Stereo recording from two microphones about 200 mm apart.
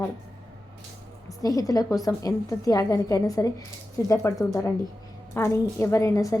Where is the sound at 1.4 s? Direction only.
15° left (ahead or behind).